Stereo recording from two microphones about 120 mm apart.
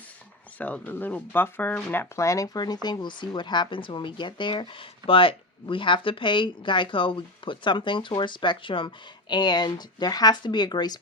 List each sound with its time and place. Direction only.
0.6 s speech: 15° left (ahead or behind); by 11.0 s 35° left (ahead or behind)